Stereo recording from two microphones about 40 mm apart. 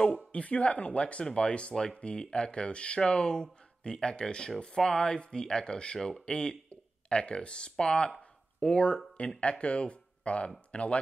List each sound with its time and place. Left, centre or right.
0.0 s speech: left
1.7 s speech: centre
8.2 s a sound: left
9.4 s speech: left